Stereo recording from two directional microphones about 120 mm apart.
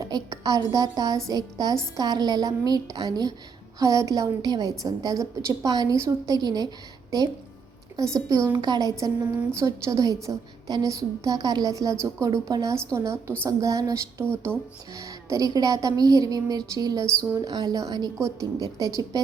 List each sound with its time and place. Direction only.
0.0 s a woman's voice: 30° right (ahead or behind)
8.3 s a woman's voice: 25° right (ahead or behind)
8.5 s a woman's voice: 35° right (ahead or behind)